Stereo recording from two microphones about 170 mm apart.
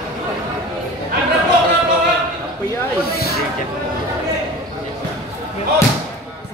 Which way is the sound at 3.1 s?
65° left (ahead or behind).